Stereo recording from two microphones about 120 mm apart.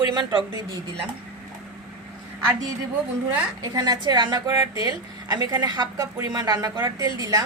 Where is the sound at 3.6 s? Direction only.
35° right (ahead or behind).